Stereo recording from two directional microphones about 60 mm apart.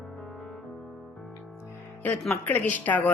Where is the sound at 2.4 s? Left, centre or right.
Left.